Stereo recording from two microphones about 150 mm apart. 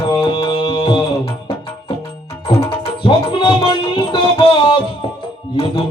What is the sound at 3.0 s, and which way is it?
Music, 35° left (ahead or behind).